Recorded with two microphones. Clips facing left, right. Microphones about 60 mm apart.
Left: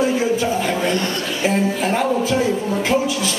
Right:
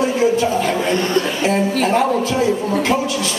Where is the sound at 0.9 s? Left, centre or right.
Right.